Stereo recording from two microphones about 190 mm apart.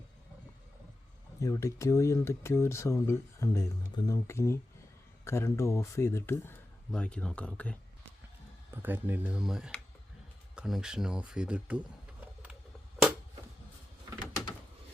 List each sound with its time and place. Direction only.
1.4 s speech: 15° left (ahead or behind)
8.7 s speech: 10° right (ahead or behind)
12.2 s a sound: 5° right (ahead or behind)